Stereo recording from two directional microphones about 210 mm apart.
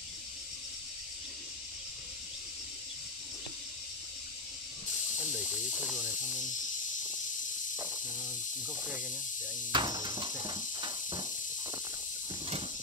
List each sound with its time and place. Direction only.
5.8 s speech: 5° right (ahead or behind)
9.7 s speech: 20° right (ahead or behind)
10.4 s a sound: 20° right (ahead or behind)